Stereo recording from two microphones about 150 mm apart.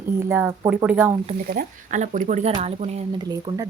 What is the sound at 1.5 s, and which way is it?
Speech, 60° right (ahead or behind).